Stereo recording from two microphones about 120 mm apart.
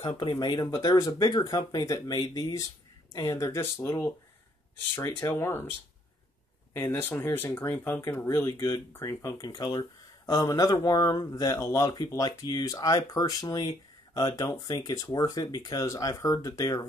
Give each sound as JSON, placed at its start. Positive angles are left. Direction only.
{"t": 0.2, "sound": "speech", "side_deg": 40}
{"t": 5.2, "sound": "speech", "side_deg": 20}
{"t": 14.8, "sound": "speech", "side_deg": 35}